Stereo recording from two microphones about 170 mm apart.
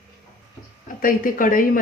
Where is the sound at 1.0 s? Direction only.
55° left (ahead or behind).